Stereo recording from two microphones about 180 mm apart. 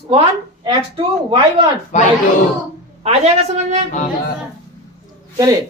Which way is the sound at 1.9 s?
40° left (ahead or behind).